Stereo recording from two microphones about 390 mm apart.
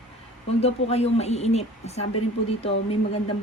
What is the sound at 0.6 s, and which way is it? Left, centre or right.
Speech, centre.